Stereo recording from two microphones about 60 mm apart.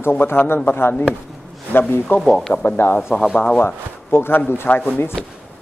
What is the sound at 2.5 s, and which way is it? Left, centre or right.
Speech, left.